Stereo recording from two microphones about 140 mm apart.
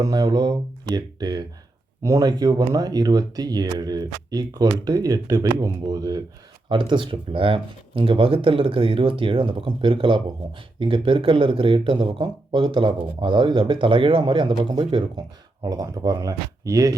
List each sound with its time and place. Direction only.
0.0 s speech: 25° right (ahead or behind)